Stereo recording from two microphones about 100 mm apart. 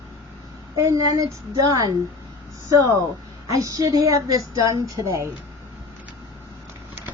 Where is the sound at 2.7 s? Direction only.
35° right (ahead or behind).